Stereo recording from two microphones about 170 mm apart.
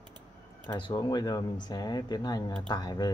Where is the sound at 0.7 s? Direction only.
25° left (ahead or behind).